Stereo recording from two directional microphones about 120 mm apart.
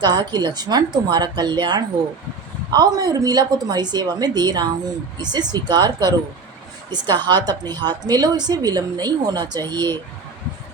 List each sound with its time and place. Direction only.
0.0 s a woman's voice: 35° right (ahead or behind)